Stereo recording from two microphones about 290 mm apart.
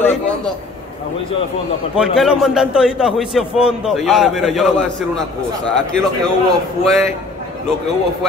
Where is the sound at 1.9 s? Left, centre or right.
Centre.